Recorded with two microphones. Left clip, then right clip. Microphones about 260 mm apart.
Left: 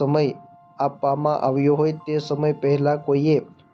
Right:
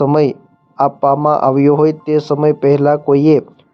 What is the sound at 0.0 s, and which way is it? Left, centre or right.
A man's voice, right.